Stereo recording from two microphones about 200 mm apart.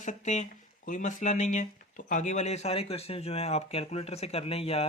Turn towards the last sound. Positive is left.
turn(degrees=30)  # may be behind; listen again after turning